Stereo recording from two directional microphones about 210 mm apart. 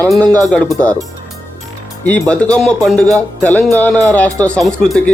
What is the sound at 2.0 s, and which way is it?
Speech, 5° left (ahead or behind).